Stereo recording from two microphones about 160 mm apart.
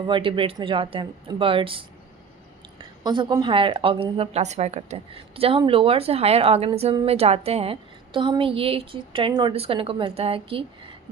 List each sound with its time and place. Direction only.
0.0 s a woman's voice: 30° right (ahead or behind)
3.0 s a woman's voice: 25° right (ahead or behind)